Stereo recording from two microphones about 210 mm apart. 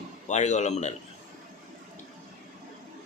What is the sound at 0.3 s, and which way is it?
Speech, 35° left (ahead or behind).